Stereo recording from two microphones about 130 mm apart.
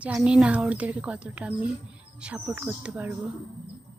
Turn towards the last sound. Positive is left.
turn(degrees=-15)  # may be behind; listen again after turning